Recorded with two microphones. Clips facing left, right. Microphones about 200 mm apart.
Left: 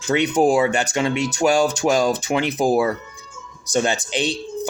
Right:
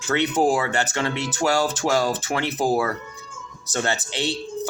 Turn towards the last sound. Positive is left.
turn(degrees=15)  # may be behind; listen again after turning